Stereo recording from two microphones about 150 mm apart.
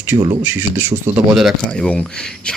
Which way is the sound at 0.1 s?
30° right (ahead or behind).